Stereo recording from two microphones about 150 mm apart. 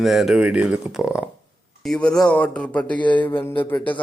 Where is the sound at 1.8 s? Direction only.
5° left (ahead or behind).